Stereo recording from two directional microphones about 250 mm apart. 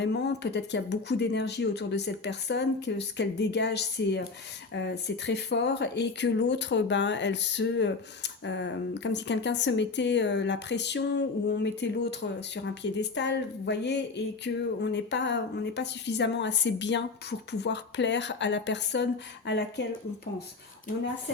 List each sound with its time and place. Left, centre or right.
0.0 s speech: left